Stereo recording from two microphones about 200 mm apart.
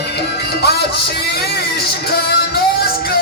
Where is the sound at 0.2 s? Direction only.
50° left (ahead or behind).